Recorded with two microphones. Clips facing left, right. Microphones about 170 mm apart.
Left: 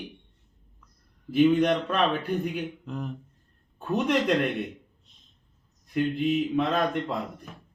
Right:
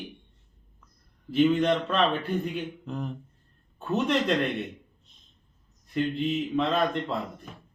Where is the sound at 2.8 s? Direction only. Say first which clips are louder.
Right 1 dB; centre (ahead or behind).